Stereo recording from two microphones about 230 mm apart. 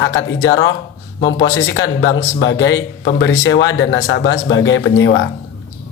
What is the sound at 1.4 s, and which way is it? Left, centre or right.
A man's voice, left.